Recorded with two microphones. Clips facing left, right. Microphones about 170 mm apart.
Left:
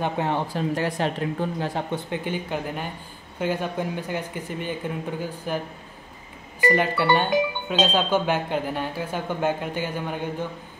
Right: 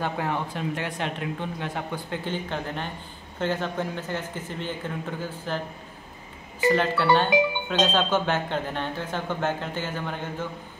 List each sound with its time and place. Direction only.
0.0 s speech: 25° left (ahead or behind)
2.0 s speech: 15° left (ahead or behind)
6.7 s speech: 15° left (ahead or behind)